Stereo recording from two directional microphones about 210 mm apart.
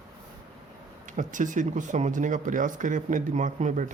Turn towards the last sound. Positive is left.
turn(degrees=-35)  # may be behind; listen again after turning